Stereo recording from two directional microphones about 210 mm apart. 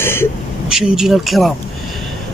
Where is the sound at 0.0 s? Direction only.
10° left (ahead or behind).